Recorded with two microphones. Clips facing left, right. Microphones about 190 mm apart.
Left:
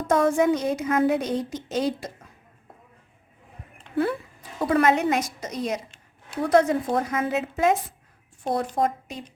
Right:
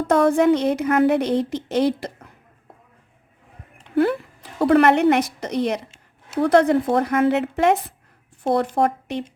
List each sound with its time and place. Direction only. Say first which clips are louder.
0.1 s a woman's voice: right 4 dB; 60° right (ahead or behind)
3.9 s a woman's voice: right 6 dB; 70° right (ahead or behind)